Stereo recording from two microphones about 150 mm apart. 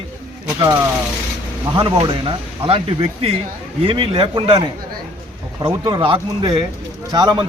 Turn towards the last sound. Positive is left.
turn(degrees=-30)  # may be behind; listen again after turning